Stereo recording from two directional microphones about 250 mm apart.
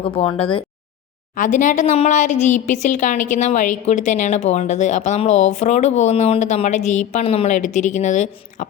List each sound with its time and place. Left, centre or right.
0.0 s a woman's voice: left
1.4 s a woman's voice: left